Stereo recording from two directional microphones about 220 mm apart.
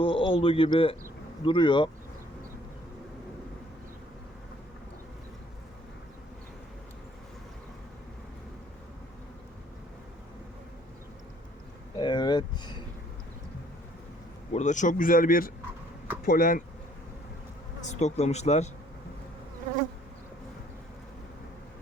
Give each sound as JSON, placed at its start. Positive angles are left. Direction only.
{"t": 0.0, "sound": "speech", "side_deg": 25}
{"t": 11.9, "sound": "a sound", "side_deg": 20}
{"t": 14.5, "sound": "a man's voice", "side_deg": 35}
{"t": 17.8, "sound": "a man's voice", "side_deg": 30}